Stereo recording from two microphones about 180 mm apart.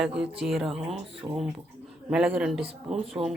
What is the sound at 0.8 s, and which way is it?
Speech, 35° right (ahead or behind).